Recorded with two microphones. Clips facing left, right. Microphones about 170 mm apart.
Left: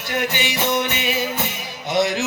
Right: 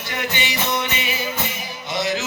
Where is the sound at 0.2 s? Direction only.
60° left (ahead or behind).